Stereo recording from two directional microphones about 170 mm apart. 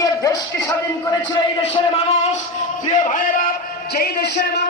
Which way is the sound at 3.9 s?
70° left (ahead or behind).